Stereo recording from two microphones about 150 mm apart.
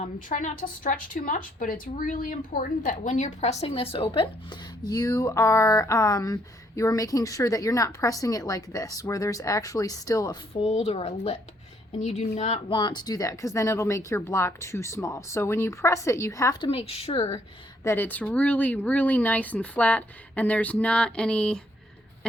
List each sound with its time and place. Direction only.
0.0 s a woman's voice: 55° left (ahead or behind); by 10.3 s 25° left (ahead or behind)
10.6 s speech: 45° left (ahead or behind)
12.7 s a woman's voice: 30° left (ahead or behind)
16.6 s a woman's voice: 40° left (ahead or behind)
17.8 s speech: 15° left (ahead or behind)